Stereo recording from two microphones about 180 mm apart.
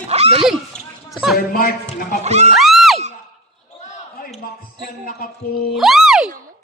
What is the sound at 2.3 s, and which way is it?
Music, 40° right (ahead or behind).